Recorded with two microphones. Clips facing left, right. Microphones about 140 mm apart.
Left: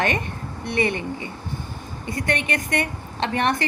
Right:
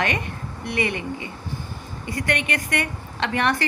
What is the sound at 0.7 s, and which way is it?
Speech, 30° left (ahead or behind).